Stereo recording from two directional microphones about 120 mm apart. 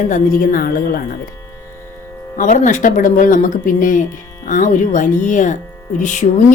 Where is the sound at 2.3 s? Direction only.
90° left.